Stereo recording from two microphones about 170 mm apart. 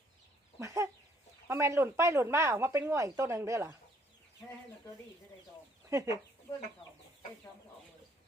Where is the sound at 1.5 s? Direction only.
15° right (ahead or behind).